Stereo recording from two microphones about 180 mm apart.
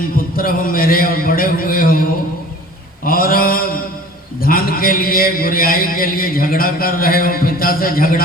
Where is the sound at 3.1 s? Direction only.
55° left (ahead or behind).